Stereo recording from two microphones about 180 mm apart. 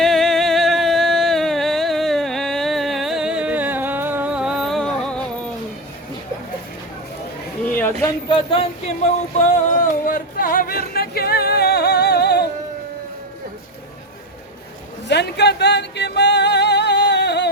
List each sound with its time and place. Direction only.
0.0 s music: centre (ahead or behind)
8.3 s a sound: 30° left (ahead or behind)
9.4 s music: 45° left (ahead or behind); by 12.5 s 65° left (ahead or behind)
15.0 s music: 70° left (ahead or behind)